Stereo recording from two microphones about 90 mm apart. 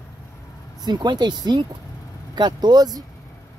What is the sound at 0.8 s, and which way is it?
Speech, 55° right (ahead or behind).